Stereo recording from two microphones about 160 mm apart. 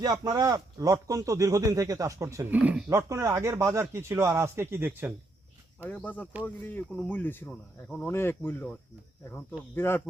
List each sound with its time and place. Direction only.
0.0 s speech: 25° right (ahead or behind)
5.8 s speech: 10° left (ahead or behind)